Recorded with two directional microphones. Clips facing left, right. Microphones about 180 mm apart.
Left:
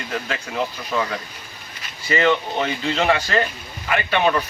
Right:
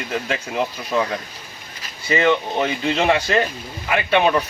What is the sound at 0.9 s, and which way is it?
Speech, 25° right (ahead or behind).